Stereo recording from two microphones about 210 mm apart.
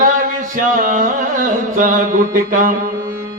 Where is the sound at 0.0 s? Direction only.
40° right (ahead or behind).